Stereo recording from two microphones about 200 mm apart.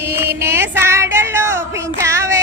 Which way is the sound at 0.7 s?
15° right (ahead or behind).